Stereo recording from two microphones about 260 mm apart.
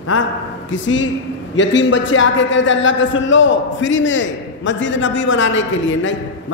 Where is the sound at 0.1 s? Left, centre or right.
Left.